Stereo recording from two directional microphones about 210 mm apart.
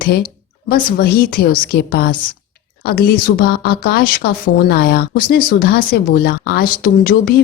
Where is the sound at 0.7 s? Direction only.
45° left (ahead or behind).